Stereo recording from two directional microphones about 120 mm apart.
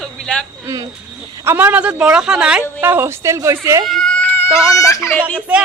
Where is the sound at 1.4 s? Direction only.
15° right (ahead or behind).